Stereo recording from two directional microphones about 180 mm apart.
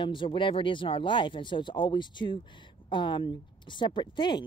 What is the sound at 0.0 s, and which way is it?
Speech, 25° left (ahead or behind).